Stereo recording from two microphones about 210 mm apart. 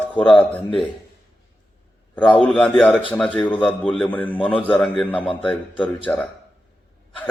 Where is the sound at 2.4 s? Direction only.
5° left (ahead or behind).